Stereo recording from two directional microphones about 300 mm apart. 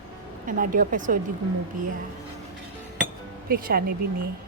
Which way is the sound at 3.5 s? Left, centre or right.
Right.